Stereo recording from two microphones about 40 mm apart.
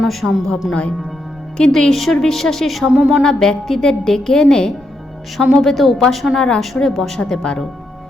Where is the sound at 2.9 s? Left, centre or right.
Right.